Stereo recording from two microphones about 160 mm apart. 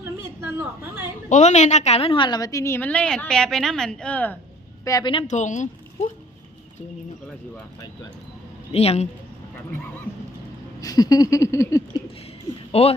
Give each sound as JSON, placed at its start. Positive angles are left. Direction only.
{"t": 1.3, "sound": "a woman's voice", "side_deg": 45}
{"t": 4.9, "sound": "a sound", "side_deg": 25}
{"t": 5.3, "sound": "speech", "side_deg": 50}
{"t": 8.7, "sound": "a man's voice", "side_deg": 40}
{"t": 10.8, "sound": "a sound", "side_deg": 25}
{"t": 12.7, "sound": "a man's voice", "side_deg": 40}